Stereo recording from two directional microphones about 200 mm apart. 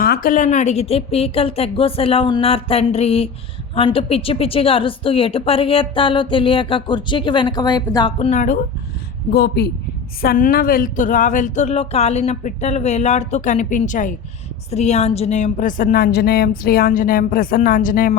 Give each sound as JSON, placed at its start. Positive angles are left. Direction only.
{"t": 0.0, "sound": "a woman's voice", "side_deg": 45}
{"t": 8.3, "sound": "speech", "side_deg": 40}
{"t": 9.3, "sound": "a woman's voice", "side_deg": 50}